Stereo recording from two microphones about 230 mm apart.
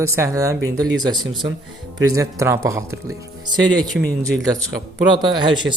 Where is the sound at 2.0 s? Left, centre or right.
Centre.